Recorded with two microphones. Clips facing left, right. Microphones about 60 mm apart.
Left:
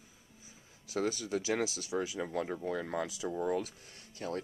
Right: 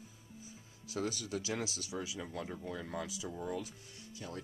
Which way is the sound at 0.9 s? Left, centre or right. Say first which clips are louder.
Left 4 dB; left.